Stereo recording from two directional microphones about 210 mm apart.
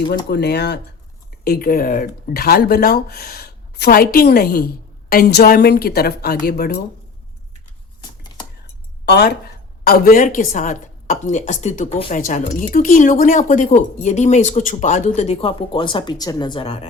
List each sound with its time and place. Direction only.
0.3 s a woman's voice: 50° left (ahead or behind)
9.0 s a woman's voice: 50° left (ahead or behind); by 16.8 s 25° left (ahead or behind)